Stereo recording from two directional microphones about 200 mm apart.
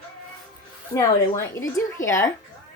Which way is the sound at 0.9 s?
15° left (ahead or behind).